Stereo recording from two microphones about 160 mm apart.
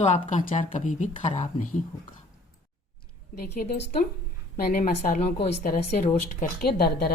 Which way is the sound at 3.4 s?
70° left (ahead or behind).